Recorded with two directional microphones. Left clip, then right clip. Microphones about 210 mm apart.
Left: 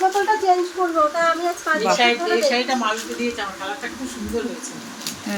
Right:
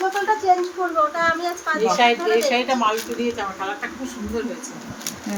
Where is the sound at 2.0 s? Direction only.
45° right (ahead or behind).